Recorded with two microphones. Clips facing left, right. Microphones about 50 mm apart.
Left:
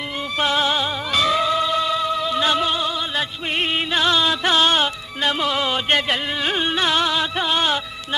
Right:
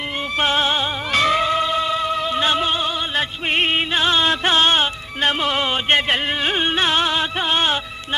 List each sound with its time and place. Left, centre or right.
0.3 s music: right
1.1 s music: right